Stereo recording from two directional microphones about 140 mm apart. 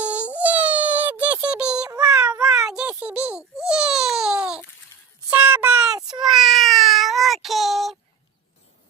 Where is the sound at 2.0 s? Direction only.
10° right (ahead or behind).